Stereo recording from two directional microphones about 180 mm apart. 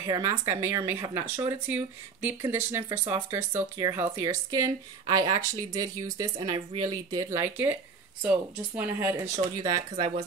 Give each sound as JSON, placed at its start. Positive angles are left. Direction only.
{"t": 0.0, "sound": "speech", "side_deg": -20}
{"t": 6.3, "sound": "speech", "side_deg": -30}